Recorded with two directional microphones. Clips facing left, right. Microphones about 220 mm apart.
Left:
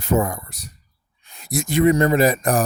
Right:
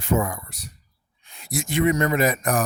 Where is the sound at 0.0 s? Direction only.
40° left (ahead or behind).